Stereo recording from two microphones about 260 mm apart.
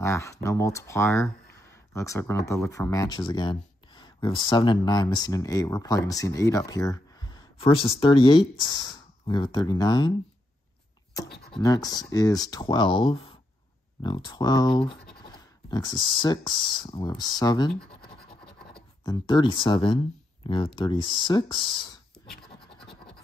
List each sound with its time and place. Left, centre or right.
0.0 s speech: centre
11.2 s a sound: left
11.5 s speech: centre
19.0 s speech: centre